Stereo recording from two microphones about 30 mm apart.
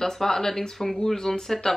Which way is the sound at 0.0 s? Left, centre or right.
Centre.